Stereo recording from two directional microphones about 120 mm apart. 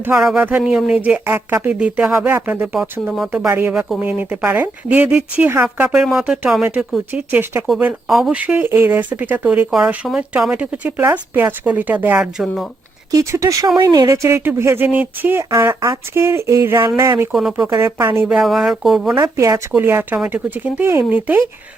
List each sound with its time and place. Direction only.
0.1 s speech: 5° right (ahead or behind)
3.5 s speech: 20° right (ahead or behind)
3.8 s speech: centre (ahead or behind)
4.0 s speech: 10° right (ahead or behind)
13.1 s speech: 25° right (ahead or behind)
17.3 s speech: 5° right (ahead or behind)
17.7 s speech: 20° right (ahead or behind)
18.3 s speech: 5° right (ahead or behind)
19.2 s speech: 25° right (ahead or behind)